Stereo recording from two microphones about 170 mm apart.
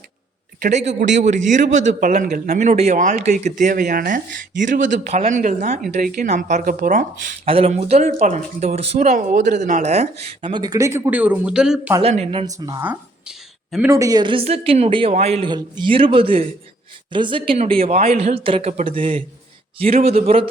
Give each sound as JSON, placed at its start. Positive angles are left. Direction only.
{"t": 0.6, "sound": "speech", "side_deg": -45}
{"t": 2.6, "sound": "speech", "side_deg": -40}
{"t": 7.4, "sound": "speech", "side_deg": -35}
{"t": 12.0, "sound": "speech", "side_deg": -35}
{"t": 12.5, "sound": "speech", "side_deg": -20}
{"t": 12.8, "sound": "speech", "side_deg": -10}
{"t": 13.9, "sound": "speech", "side_deg": -20}